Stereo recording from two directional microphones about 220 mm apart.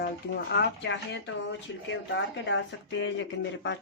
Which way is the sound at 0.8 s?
55° left (ahead or behind).